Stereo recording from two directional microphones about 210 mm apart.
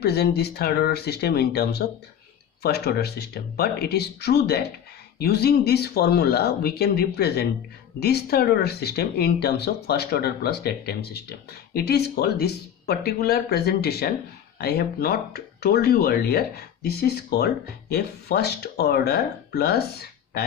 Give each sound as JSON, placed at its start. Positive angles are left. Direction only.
{"t": 0.0, "sound": "speech", "side_deg": 50}